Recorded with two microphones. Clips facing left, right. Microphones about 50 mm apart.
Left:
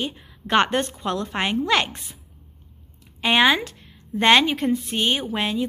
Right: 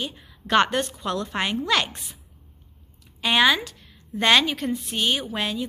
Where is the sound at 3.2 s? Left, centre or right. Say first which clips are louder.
Left 2 dB; left.